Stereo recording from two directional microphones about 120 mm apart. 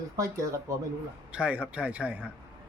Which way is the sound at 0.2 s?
30° right (ahead or behind).